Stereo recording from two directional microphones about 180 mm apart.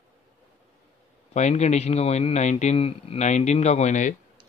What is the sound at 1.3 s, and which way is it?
A man's voice, 40° left (ahead or behind).